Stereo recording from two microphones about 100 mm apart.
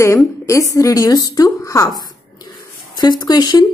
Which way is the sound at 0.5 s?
35° left (ahead or behind).